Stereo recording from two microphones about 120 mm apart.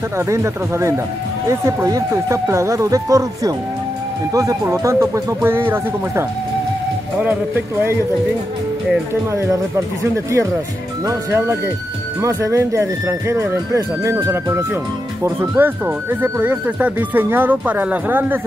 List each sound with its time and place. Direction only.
0.2 s speech: 25° right (ahead or behind)
10.1 s speech: 25° right (ahead or behind)